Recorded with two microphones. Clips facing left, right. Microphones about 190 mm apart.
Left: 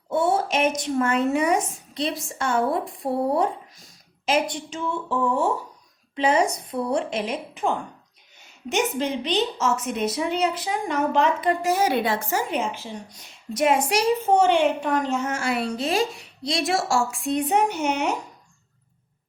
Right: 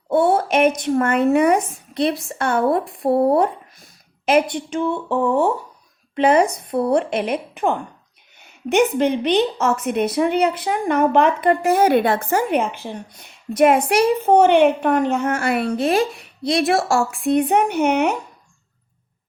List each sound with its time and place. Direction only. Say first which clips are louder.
0.1 s a woman's voice: right 5 dB; 60° right (ahead or behind)